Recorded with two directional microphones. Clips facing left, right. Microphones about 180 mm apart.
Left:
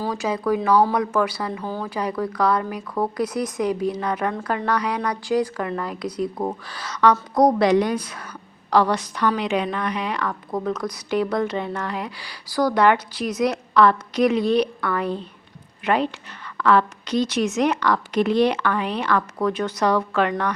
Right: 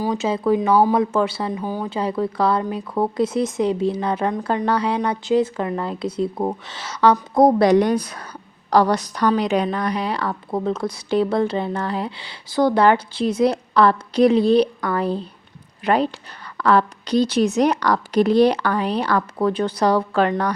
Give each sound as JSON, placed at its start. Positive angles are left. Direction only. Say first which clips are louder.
{"t": 0.0, "sound": "speech", "louder": "right 3 dB", "side_deg": -20}
{"t": 7.6, "sound": "a woman's voice", "louder": "right 3 dB", "side_deg": -40}